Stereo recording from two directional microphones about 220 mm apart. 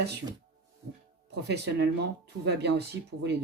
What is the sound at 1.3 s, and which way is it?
Speech, 50° right (ahead or behind).